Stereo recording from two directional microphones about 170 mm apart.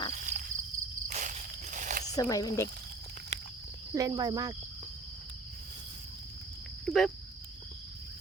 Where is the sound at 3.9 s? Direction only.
20° right (ahead or behind).